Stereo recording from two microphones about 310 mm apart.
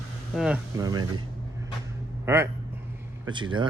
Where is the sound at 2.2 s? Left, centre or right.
Centre.